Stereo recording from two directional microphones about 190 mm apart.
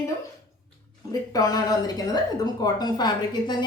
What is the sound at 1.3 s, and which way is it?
Speech, 20° left (ahead or behind).